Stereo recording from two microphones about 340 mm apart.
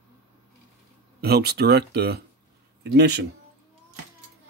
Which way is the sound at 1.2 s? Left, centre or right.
Right.